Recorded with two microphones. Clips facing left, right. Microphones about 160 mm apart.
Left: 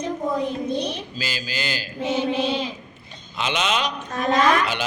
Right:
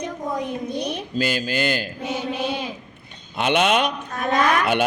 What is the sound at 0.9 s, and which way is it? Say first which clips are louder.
Speech: right 7 dB; 55° right (ahead or behind).